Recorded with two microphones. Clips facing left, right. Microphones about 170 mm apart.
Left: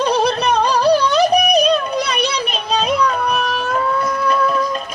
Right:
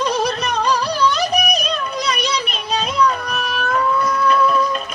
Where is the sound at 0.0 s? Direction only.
30° left (ahead or behind).